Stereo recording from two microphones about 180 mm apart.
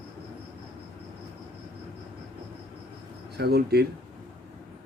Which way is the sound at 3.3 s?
60° right (ahead or behind).